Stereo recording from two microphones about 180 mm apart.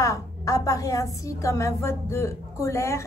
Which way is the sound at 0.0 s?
20° left (ahead or behind).